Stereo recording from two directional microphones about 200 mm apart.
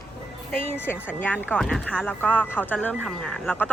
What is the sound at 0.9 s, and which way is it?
Speech, 10° left (ahead or behind).